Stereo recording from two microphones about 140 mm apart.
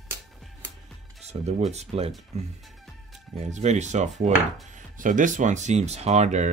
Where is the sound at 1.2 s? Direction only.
50° right (ahead or behind).